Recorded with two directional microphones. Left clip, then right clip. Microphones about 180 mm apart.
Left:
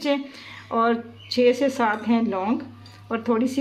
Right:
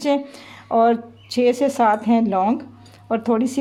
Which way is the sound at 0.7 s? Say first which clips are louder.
Right 5 dB; 65° right (ahead or behind).